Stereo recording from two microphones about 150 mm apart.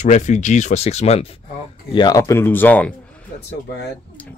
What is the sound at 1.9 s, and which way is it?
Speech, 30° left (ahead or behind).